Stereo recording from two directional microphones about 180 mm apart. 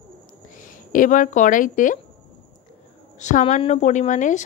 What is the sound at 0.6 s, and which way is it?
Speech, 50° left (ahead or behind).